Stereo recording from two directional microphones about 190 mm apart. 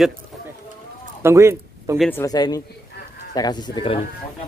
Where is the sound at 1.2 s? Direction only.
15° right (ahead or behind).